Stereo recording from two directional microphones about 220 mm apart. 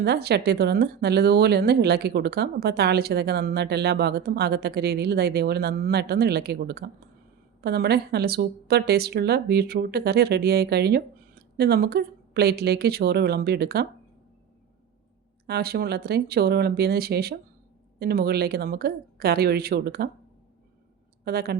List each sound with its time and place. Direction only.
0.0 s speech: 45° right (ahead or behind)
15.4 s speech: 45° right (ahead or behind)
21.2 s a woman's voice: 45° right (ahead or behind)